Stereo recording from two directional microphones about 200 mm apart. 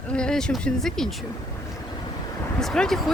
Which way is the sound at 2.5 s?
5° left (ahead or behind).